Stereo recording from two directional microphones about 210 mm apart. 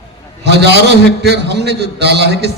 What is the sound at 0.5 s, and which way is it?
A man's voice, 50° right (ahead or behind).